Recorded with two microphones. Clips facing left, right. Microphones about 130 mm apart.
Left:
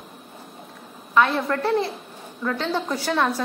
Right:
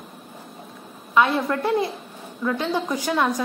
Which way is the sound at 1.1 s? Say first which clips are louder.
Even; 15° right (ahead or behind).